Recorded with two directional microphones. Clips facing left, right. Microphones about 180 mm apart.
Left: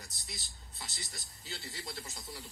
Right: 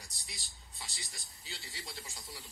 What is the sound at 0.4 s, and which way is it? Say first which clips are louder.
Speech: left 2 dB; 10° right (ahead or behind).